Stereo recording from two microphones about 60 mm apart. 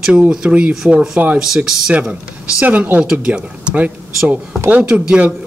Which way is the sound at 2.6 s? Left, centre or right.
Right.